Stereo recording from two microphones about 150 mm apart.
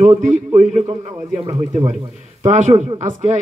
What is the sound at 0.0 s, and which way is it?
Speech, 55° right (ahead or behind).